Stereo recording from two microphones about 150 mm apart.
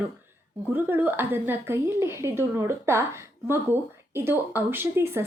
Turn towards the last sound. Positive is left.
turn(degrees=-15)  # may be behind; listen again after turning